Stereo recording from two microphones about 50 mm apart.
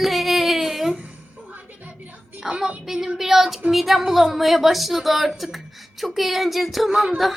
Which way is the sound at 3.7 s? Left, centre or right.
Centre.